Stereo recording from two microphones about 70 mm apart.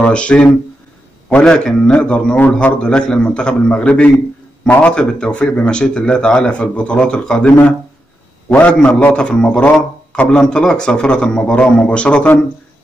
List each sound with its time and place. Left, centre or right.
0.0 s a man's voice: centre
8.7 s speech: centre